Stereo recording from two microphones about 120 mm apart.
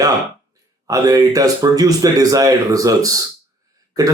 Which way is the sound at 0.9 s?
30° right (ahead or behind).